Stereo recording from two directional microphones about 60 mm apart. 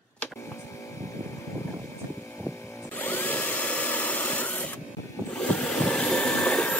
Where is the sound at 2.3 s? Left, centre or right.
Left.